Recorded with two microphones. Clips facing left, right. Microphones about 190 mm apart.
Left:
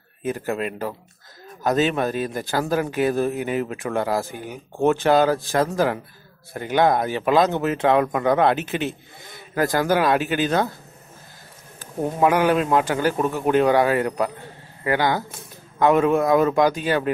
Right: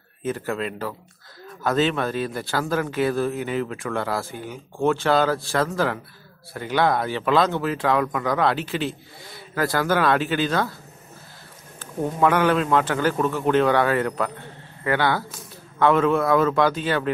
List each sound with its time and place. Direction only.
0.2 s a man's voice: 15° left (ahead or behind)
11.8 s a man's voice: 15° left (ahead or behind)